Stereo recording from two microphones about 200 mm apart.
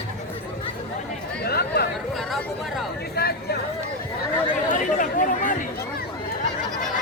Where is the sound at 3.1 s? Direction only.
50° left (ahead or behind).